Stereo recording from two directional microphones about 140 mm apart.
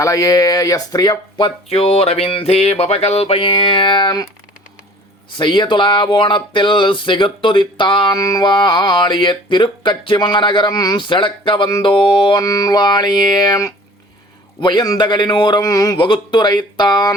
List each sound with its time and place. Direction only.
0.0 s speech: 25° left (ahead or behind)
5.4 s speech: 35° left (ahead or behind)